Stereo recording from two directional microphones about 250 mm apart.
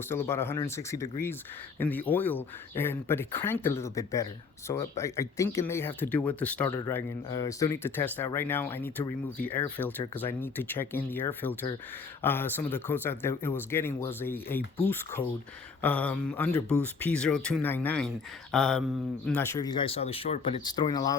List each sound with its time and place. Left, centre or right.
0.1 s speech: centre
15.8 s speech: centre